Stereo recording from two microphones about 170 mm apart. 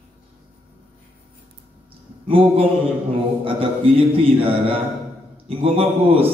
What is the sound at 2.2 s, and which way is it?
A man's voice, 30° right (ahead or behind).